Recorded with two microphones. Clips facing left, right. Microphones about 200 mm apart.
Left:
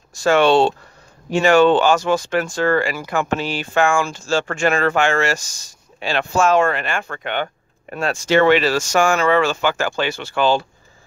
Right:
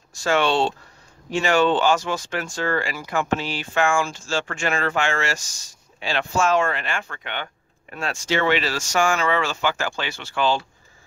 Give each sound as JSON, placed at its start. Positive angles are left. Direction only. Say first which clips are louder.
{"t": 0.2, "sound": "speech", "louder": "left 6 dB", "side_deg": 60}